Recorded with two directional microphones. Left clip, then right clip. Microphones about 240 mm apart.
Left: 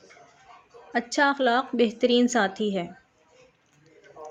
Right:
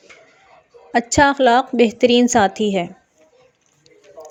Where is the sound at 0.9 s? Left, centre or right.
Right.